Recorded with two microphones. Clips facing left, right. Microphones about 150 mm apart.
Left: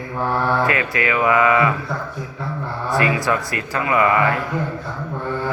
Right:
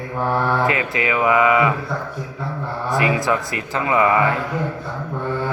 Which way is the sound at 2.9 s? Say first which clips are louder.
Even; 20° right (ahead or behind).